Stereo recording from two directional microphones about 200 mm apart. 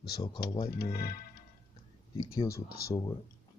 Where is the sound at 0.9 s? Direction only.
50° left (ahead or behind).